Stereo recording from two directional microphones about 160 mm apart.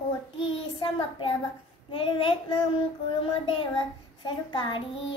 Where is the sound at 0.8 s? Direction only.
35° left (ahead or behind).